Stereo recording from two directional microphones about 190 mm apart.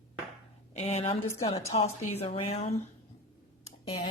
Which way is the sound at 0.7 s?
35° left (ahead or behind).